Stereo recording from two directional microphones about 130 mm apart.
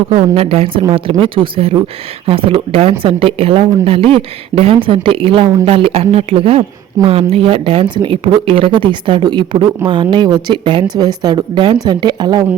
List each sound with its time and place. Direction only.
0.1 s a woman's voice: 50° right (ahead or behind); by 12.5 s 35° right (ahead or behind)